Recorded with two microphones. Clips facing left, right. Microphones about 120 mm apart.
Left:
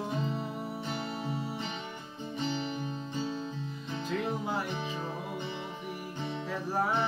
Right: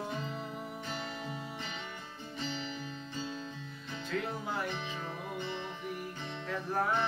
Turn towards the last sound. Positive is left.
turn(degrees=10)  # may be behind; listen again after turning